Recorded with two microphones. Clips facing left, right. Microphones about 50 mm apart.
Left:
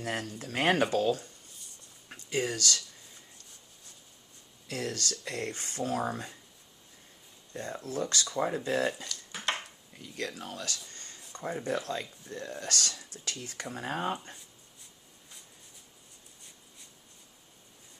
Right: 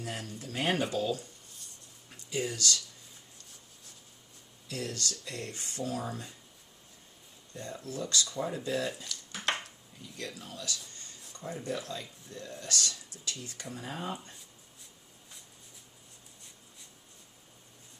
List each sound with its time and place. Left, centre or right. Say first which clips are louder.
0.0 s speech: left 4 dB; left
2.0 s a sound: left 3 dB; left
4.7 s speech: left 2 dB; left
7.5 s speech: left 4 dB; left
9.0 s dishes: even; centre
10.0 s speech: left 5 dB; left